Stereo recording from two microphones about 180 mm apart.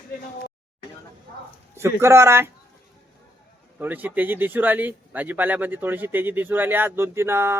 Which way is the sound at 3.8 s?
10° right (ahead or behind).